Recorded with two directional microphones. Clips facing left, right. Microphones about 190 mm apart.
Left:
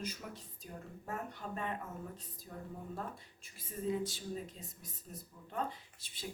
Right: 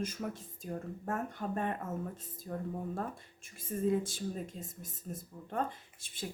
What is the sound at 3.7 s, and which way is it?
Speech, 50° right (ahead or behind).